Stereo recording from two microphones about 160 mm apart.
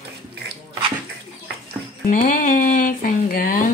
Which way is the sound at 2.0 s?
55° left (ahead or behind).